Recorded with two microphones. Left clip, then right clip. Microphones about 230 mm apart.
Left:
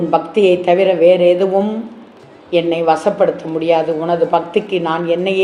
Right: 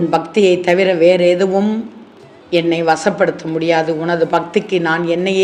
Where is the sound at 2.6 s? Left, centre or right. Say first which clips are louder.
Even; right.